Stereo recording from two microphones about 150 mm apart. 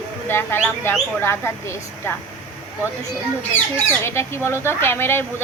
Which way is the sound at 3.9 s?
15° left (ahead or behind).